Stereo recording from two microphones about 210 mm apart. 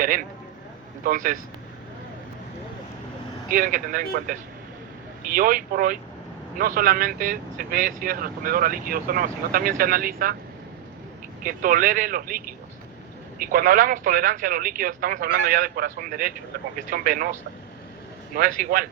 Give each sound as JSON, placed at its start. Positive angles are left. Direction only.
{"t": 0.0, "sound": "speech", "side_deg": -40}
{"t": 3.5, "sound": "speech", "side_deg": -40}
{"t": 11.4, "sound": "speech", "side_deg": -40}
{"t": 18.3, "sound": "speech", "side_deg": -40}